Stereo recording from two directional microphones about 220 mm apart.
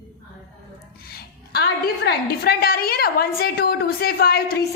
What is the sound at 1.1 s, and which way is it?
A woman's voice, 45° left (ahead or behind).